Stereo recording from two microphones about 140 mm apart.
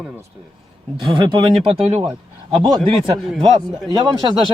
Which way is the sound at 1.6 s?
45° right (ahead or behind).